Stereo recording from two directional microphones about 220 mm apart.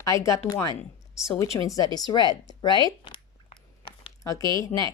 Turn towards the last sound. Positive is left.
turn(degrees=15)  # may be behind; listen again after turning